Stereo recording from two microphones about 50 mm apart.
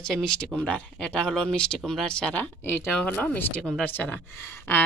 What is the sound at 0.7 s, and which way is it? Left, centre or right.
Speech, centre.